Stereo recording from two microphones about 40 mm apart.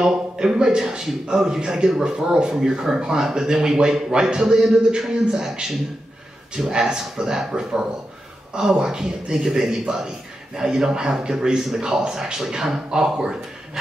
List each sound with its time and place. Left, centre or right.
0.0 s a man's voice: centre
6.7 s a man's voice: centre